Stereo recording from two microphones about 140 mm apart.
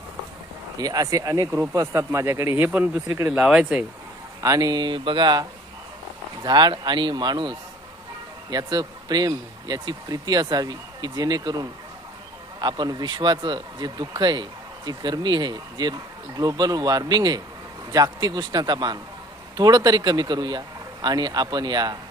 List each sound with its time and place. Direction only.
0.8 s speech: 25° right (ahead or behind); by 3.8 s 10° right (ahead or behind)
4.4 s speech: 25° right (ahead or behind)